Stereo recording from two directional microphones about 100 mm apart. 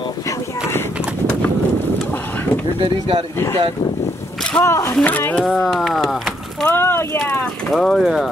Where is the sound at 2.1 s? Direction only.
20° left (ahead or behind).